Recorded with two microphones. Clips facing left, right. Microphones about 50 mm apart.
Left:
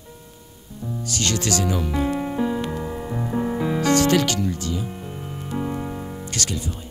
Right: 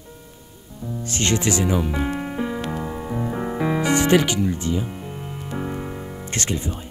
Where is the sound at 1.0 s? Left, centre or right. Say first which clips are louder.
Right 3 dB; right.